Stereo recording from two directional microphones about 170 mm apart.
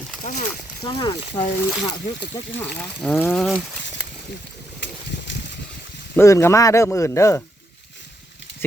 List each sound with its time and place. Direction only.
0.8 s speech: 25° left (ahead or behind)
2.7 s speech: 5° left (ahead or behind)
4.8 s a sound: 90° left
6.1 s speech: 15° left (ahead or behind)